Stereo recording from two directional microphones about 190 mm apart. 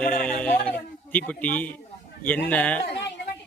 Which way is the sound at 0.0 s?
5° left (ahead or behind).